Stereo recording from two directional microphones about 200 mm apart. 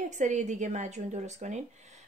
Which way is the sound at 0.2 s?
35° right (ahead or behind).